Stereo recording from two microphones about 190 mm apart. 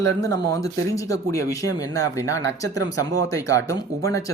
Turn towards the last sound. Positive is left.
turn(degrees=15)  # may be behind; listen again after turning